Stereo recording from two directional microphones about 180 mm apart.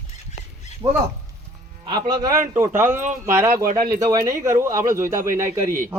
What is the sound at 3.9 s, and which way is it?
Speech, 20° right (ahead or behind).